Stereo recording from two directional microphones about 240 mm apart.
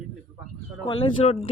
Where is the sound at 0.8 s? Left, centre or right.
Centre.